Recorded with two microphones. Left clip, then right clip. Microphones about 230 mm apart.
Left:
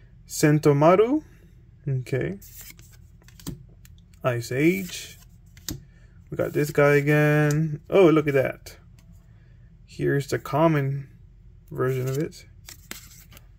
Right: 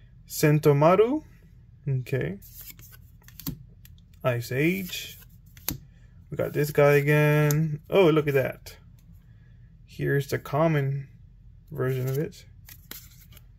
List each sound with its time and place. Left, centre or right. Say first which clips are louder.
0.3 s speech: left 2 dB; centre
3.3 s typing: right 1 dB; centre
4.2 s speech: left 2 dB; centre
6.3 s speech: left 2 dB; centre
9.8 s speech: left 2 dB; centre
12.6 s scissors: left 6 dB; centre